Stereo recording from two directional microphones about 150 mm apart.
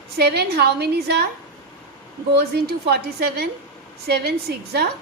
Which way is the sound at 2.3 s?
90° right.